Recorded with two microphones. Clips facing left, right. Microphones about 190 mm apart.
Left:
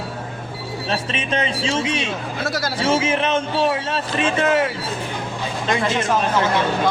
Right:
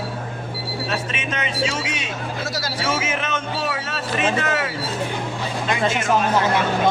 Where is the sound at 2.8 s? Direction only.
30° left (ahead or behind).